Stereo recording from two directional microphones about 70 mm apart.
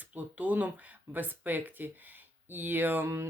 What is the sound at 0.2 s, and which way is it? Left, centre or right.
Speech, right.